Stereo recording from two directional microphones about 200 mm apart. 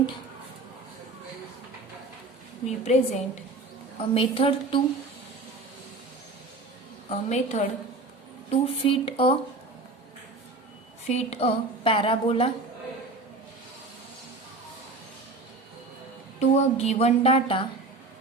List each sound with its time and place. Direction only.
2.6 s a woman's voice: 35° left (ahead or behind)
7.1 s a woman's voice: 35° left (ahead or behind)
11.0 s a woman's voice: 35° left (ahead or behind)
16.4 s speech: 30° left (ahead or behind)